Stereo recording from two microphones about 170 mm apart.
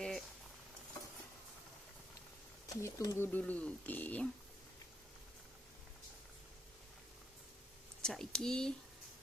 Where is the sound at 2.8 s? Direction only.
20° left (ahead or behind).